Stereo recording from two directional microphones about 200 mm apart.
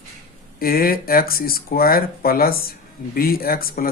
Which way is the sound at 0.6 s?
45° left (ahead or behind).